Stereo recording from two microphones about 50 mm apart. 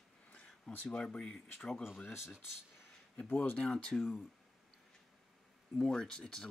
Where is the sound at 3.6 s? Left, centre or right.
Centre.